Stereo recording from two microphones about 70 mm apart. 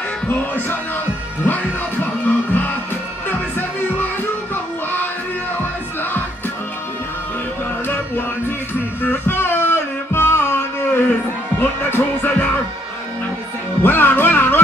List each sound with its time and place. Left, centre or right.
0.3 s speech: left
1.4 s music: left
9.0 s music: left
13.8 s music: left